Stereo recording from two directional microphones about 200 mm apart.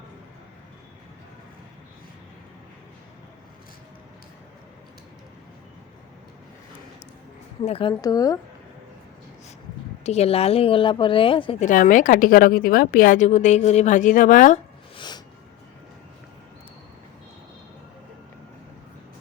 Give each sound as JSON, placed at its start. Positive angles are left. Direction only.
{"t": 7.6, "sound": "speech", "side_deg": 30}
{"t": 10.0, "sound": "speech", "side_deg": 30}
{"t": 11.6, "sound": "a woman's voice", "side_deg": 40}
{"t": 14.9, "sound": "music", "side_deg": 20}